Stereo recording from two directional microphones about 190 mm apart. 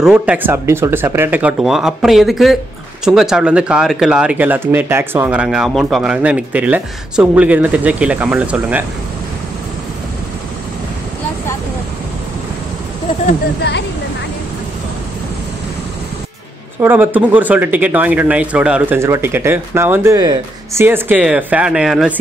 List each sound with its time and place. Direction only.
0.0 s speech: 5° right (ahead or behind)
13.6 s speech: 65° left (ahead or behind)
16.8 s speech: 10° right (ahead or behind)